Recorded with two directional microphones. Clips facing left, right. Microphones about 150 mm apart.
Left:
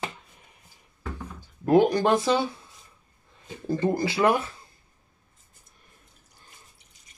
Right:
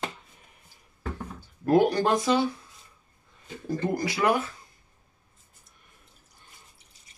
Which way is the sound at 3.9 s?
25° left (ahead or behind).